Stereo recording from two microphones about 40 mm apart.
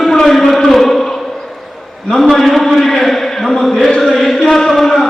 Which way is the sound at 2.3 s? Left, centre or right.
Centre.